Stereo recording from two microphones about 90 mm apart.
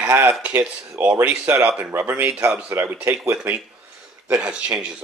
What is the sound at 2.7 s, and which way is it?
Speech, 25° right (ahead or behind).